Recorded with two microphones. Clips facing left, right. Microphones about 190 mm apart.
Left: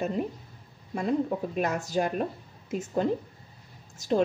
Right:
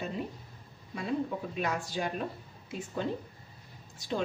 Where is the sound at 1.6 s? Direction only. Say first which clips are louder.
Left 5 dB; 40° left (ahead or behind).